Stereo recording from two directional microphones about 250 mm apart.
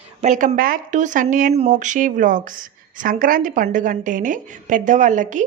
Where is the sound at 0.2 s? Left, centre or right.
Right.